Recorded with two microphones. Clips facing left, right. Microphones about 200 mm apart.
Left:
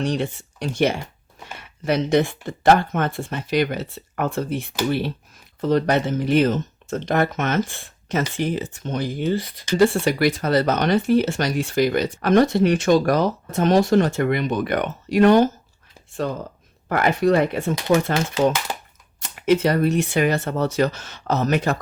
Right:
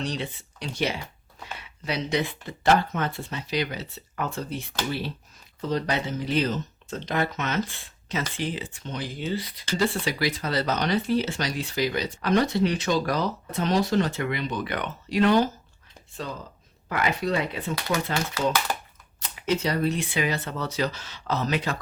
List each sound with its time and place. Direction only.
0.0 s speech: 50° left (ahead or behind)
19.2 s speech: 55° left (ahead or behind)